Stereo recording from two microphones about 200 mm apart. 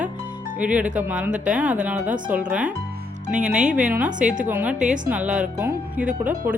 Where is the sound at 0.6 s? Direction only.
5° right (ahead or behind).